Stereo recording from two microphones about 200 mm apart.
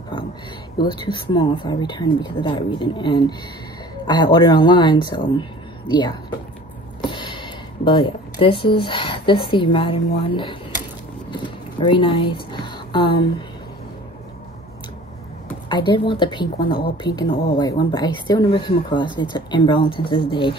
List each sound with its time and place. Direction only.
0.8 s speech: 25° left (ahead or behind)
11.2 s a sound: 25° left (ahead or behind)
15.7 s speech: 25° left (ahead or behind)